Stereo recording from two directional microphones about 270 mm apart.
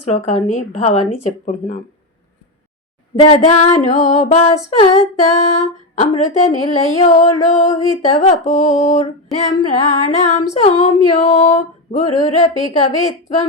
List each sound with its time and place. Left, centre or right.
0.0 s female singing: left
3.2 s female singing: left